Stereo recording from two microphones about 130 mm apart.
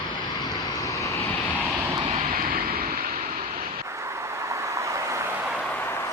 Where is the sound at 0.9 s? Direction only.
25° left (ahead or behind).